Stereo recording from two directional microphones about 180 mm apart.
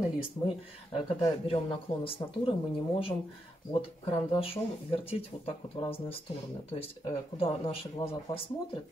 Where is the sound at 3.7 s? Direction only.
30° left (ahead or behind).